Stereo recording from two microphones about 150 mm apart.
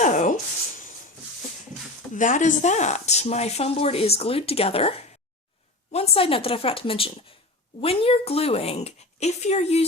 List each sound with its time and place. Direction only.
0.0 s rub: 55° left (ahead or behind)
2.1 s speech: 60° left (ahead or behind)